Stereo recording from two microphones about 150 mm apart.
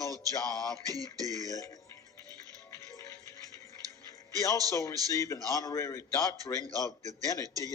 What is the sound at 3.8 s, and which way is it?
Music, 25° right (ahead or behind).